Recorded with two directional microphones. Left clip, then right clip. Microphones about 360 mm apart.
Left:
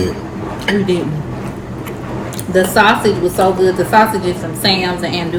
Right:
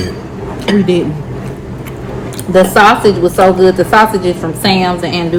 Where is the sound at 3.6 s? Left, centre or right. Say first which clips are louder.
Right 3 dB; right.